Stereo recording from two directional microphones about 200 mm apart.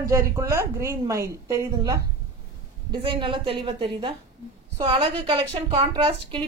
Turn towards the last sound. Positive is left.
turn(degrees=-25)  # may be behind; listen again after turning